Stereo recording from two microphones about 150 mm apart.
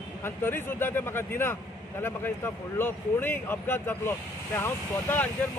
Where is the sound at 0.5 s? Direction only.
15° left (ahead or behind).